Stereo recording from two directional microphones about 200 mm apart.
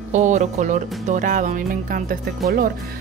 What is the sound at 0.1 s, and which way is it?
Speech, 35° right (ahead or behind).